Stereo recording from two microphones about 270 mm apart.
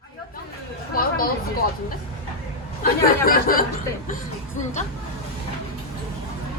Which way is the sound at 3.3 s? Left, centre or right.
Left.